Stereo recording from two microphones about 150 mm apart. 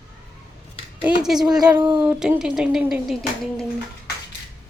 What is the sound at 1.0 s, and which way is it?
Speech, 5° right (ahead or behind).